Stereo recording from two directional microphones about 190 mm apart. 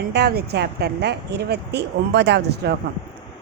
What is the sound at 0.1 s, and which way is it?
Speech, 55° right (ahead or behind).